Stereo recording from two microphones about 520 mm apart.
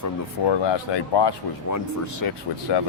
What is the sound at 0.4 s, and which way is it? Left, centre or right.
Speech, left.